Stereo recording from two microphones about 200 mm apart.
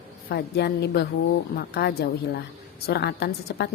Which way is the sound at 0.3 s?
55° left (ahead or behind).